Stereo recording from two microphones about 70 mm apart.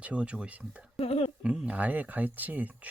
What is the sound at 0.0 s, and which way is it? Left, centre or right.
Speech, centre.